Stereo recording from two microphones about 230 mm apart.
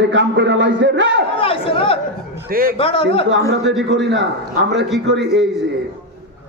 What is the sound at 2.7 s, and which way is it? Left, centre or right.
Speech, left.